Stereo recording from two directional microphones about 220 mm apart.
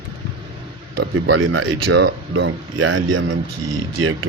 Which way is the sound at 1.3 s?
60° right (ahead or behind).